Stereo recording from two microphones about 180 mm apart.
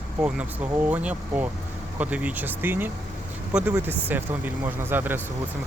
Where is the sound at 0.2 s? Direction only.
5° right (ahead or behind).